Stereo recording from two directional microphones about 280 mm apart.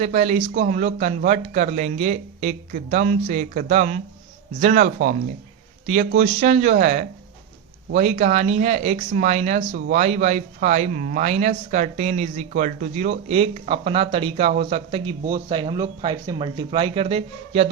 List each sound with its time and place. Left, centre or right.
0.0 s speech: right